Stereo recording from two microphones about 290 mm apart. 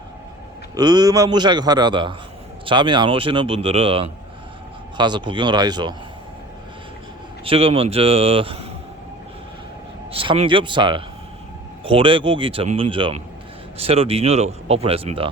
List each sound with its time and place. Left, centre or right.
0.8 s speech: centre
7.4 s speech: centre
10.1 s speech: centre